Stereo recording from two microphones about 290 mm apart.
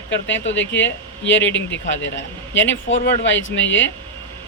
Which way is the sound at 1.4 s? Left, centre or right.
Centre.